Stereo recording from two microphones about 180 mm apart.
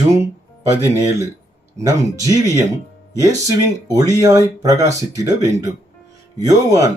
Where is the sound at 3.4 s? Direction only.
20° right (ahead or behind).